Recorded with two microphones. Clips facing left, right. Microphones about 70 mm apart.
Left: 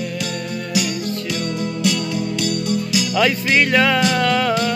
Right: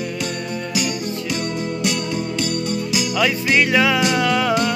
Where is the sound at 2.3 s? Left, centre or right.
Centre.